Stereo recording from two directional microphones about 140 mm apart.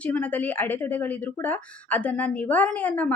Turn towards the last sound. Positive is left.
turn(degrees=10)  # may be behind; listen again after turning